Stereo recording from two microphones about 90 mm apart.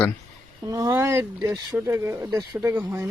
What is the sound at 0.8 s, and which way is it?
Speech, 30° right (ahead or behind).